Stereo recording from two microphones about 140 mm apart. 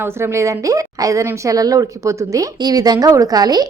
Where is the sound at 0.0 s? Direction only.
20° right (ahead or behind).